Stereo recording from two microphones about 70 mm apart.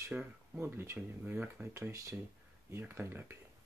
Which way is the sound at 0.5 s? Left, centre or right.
Right.